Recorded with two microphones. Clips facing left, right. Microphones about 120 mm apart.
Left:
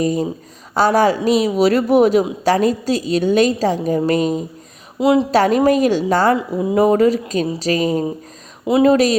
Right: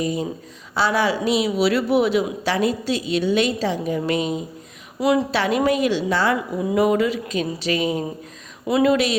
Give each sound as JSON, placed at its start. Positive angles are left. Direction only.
{"t": 0.0, "sound": "a woman's voice", "side_deg": 40}
{"t": 4.9, "sound": "a woman's voice", "side_deg": 20}
{"t": 5.3, "sound": "a woman's voice", "side_deg": 40}
{"t": 6.3, "sound": "speech", "side_deg": 25}
{"t": 6.9, "sound": "a woman's voice", "side_deg": 40}
{"t": 8.6, "sound": "speech", "side_deg": 25}
{"t": 8.9, "sound": "a woman's voice", "side_deg": 40}